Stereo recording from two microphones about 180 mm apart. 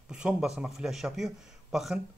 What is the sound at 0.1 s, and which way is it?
Speech, 5° right (ahead or behind).